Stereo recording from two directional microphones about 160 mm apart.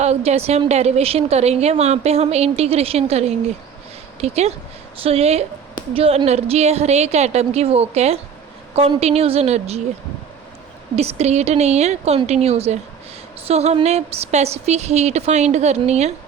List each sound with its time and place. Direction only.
0.0 s a woman's voice: 40° right (ahead or behind)
10.9 s a woman's voice: 40° right (ahead or behind)